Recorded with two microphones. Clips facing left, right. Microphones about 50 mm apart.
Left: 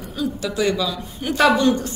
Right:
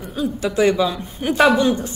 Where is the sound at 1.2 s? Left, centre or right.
Centre.